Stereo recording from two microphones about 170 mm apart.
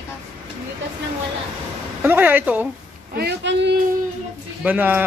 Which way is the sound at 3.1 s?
80° right.